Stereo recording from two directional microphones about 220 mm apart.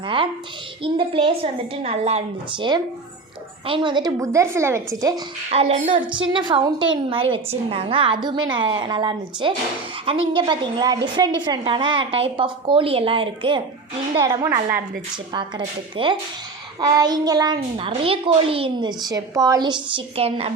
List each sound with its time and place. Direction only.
0.8 s a child's voice: 25° right (ahead or behind)
5.5 s a child's voice: 30° right (ahead or behind)